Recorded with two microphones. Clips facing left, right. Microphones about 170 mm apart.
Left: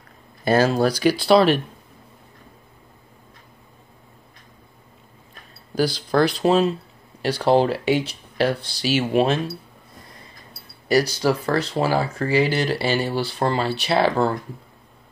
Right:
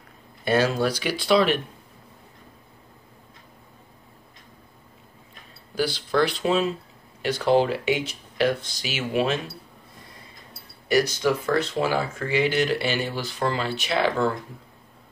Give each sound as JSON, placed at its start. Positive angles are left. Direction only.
{"t": 0.5, "sound": "speech", "side_deg": 40}
{"t": 5.8, "sound": "speech", "side_deg": 40}
{"t": 10.9, "sound": "speech", "side_deg": 35}